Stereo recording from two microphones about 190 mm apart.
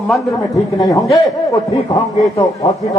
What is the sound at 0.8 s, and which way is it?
Speech, 20° left (ahead or behind).